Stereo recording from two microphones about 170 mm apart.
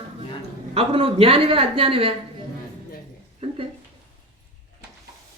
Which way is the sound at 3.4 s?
35° right (ahead or behind).